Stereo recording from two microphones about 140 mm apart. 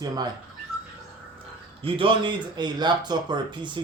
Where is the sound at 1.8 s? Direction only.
40° right (ahead or behind).